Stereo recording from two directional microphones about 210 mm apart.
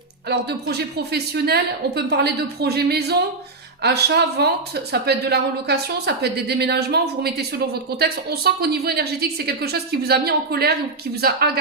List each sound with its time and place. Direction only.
0.3 s speech: 50° right (ahead or behind)